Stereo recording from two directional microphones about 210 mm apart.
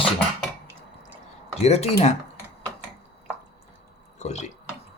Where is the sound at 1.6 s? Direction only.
30° left (ahead or behind).